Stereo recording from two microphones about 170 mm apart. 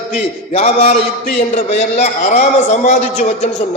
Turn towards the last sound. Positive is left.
turn(degrees=40)  # may be behind; listen again after turning